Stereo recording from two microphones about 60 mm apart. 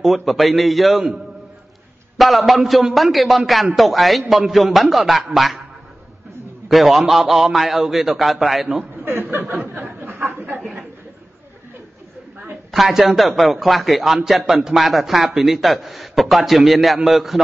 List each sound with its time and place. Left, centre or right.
0.0 s a man's voice: centre
2.1 s a man's voice: centre
6.7 s a man's voice: centre
8.9 s chuckle: right
9.6 s a sound: right
10.6 s a sound: centre
12.7 s a man's voice: centre